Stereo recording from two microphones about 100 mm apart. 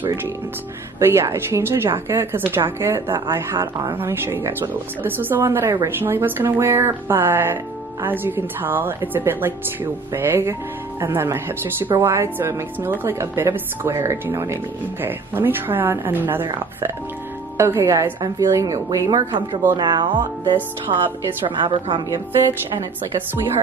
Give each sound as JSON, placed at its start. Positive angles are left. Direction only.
{"t": 0.9, "sound": "a woman's voice", "side_deg": -30}
{"t": 3.5, "sound": "speech", "side_deg": -35}
{"t": 3.9, "sound": "a woman's voice", "side_deg": -25}
{"t": 17.6, "sound": "a woman's voice", "side_deg": -25}